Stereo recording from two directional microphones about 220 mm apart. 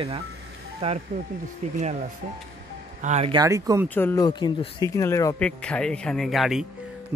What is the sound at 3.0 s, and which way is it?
Speech, 30° right (ahead or behind).